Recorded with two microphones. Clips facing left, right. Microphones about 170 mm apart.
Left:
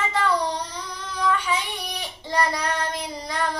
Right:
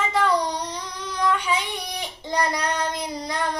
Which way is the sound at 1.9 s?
15° right (ahead or behind).